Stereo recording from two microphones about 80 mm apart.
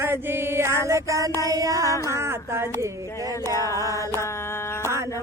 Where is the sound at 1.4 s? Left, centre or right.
Right.